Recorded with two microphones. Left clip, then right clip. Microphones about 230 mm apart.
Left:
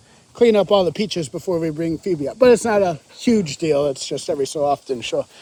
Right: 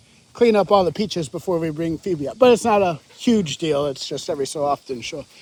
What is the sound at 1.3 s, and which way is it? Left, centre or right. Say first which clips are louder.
Speech: left 1 dB; centre.